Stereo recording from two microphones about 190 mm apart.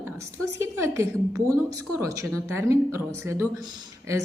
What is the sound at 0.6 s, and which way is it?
A woman's voice, 15° right (ahead or behind).